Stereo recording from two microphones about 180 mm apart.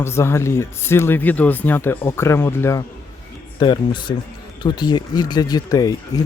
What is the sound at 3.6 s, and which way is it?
Speech, 25° left (ahead or behind).